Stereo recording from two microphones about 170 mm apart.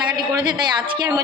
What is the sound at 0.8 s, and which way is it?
Speech, 25° right (ahead or behind).